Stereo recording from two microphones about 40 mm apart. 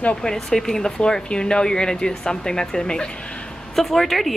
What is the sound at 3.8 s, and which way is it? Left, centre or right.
Speech, centre.